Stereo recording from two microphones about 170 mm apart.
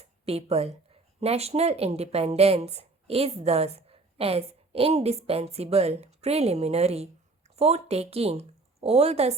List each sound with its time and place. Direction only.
0.0 s speech: 40° right (ahead or behind)